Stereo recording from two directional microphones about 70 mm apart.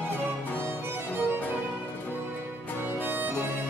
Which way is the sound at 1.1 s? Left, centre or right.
Right.